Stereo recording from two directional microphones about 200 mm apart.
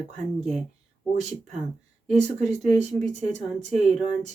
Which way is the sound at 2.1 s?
35° right (ahead or behind).